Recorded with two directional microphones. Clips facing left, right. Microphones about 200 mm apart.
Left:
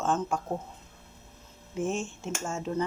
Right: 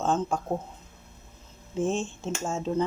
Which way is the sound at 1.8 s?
30° right (ahead or behind).